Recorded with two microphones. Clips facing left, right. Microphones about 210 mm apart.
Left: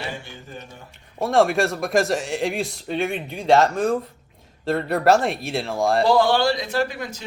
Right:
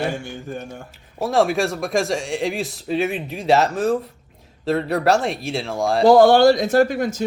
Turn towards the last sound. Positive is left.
turn(degrees=-45)  # may be behind; listen again after turning